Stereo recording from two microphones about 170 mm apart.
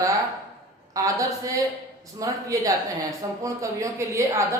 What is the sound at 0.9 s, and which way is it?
A woman's voice, 20° right (ahead or behind).